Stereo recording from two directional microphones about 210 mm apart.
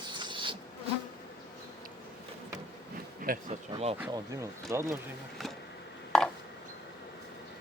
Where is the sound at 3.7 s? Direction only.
30° right (ahead or behind).